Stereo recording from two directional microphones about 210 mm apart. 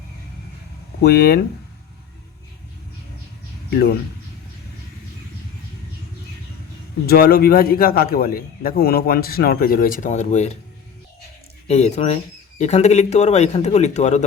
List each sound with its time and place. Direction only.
1.0 s a man's voice: 50° left (ahead or behind)
7.1 s a man's voice: 45° left (ahead or behind)
11.7 s speech: 30° left (ahead or behind)